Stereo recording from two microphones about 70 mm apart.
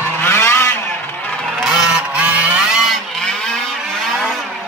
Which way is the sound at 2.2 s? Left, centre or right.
Centre.